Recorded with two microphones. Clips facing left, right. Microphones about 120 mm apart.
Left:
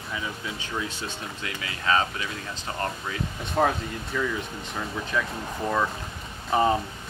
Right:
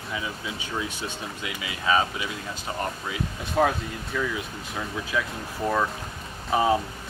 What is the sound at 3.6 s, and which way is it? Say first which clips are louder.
Speech: right 1 dB; centre (ahead or behind).